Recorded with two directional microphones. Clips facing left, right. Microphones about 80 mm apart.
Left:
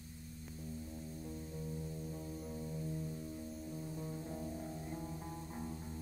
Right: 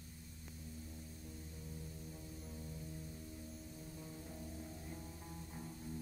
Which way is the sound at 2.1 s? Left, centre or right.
Left.